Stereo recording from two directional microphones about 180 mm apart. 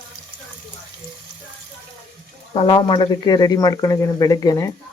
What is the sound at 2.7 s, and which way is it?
Speech, 25° left (ahead or behind).